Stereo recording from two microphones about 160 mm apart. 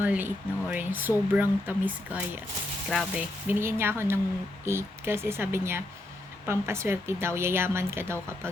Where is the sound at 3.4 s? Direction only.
15° right (ahead or behind).